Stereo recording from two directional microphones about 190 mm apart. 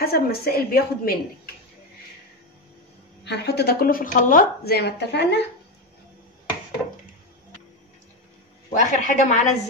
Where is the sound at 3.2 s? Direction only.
60° left (ahead or behind).